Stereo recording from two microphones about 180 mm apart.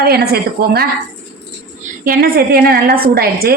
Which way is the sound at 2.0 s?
55° right (ahead or behind).